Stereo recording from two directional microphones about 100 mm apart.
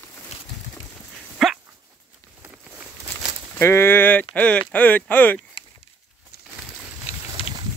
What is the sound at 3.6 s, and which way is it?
Speech, 25° left (ahead or behind).